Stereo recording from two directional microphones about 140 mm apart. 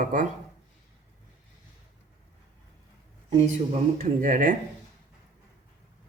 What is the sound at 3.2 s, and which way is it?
Speech, 50° right (ahead or behind).